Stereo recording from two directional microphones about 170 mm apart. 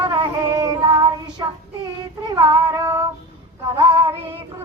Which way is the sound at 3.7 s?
25° right (ahead or behind).